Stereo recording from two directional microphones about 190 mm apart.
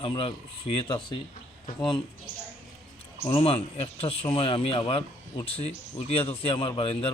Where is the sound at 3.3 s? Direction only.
30° left (ahead or behind).